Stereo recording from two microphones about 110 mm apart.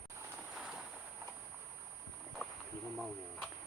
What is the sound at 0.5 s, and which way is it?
Vehicle, 5° right (ahead or behind).